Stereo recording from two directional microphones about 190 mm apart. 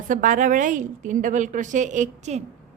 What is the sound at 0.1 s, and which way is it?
A woman's voice, 45° right (ahead or behind).